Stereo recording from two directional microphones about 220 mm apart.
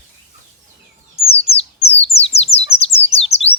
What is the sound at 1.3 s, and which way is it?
Bird, 25° left (ahead or behind).